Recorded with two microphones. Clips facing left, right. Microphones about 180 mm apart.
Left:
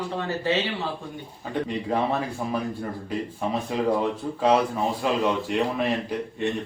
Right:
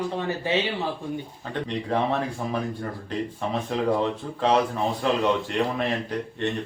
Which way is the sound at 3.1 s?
10° left (ahead or behind).